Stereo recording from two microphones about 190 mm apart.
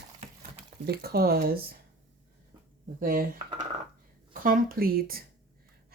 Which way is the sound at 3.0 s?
50° right (ahead or behind).